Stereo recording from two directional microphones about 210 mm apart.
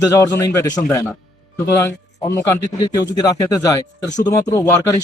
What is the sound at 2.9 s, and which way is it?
Speech, 15° left (ahead or behind).